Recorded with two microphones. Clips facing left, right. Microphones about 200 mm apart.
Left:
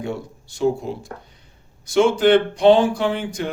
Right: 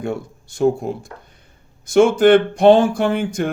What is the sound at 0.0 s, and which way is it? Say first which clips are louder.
Speech: right 3 dB; 50° right (ahead or behind).